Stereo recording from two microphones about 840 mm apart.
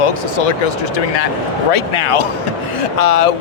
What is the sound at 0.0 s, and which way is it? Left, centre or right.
Speech, left.